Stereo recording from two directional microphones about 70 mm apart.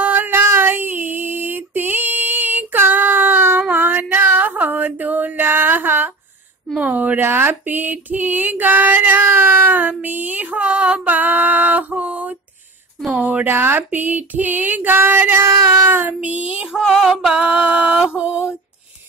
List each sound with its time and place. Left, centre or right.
0.0 s female singing: right
6.8 s speech: right
15.6 s child singing: right
15.9 s speech: right
16.7 s music: centre